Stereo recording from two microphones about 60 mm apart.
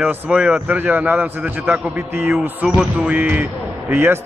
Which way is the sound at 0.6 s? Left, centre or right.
Right.